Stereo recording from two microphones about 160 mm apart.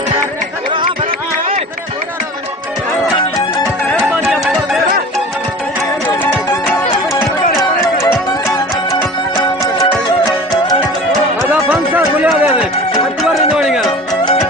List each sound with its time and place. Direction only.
3.9 s music: 5° right (ahead or behind)
8.0 s music: 20° left (ahead or behind)
11.5 s a sound: 10° right (ahead or behind)
13.5 s music: 5° right (ahead or behind)